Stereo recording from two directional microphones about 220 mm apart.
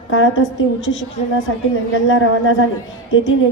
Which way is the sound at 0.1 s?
60° left (ahead or behind).